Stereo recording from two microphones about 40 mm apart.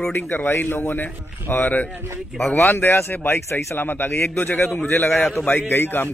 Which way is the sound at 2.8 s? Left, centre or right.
Left.